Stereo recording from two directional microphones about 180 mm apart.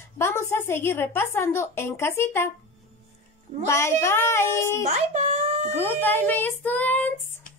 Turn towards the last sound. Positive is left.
turn(degrees=10)  # may be behind; listen again after turning